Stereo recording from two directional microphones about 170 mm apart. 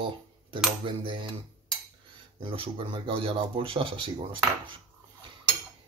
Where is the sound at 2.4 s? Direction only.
30° right (ahead or behind).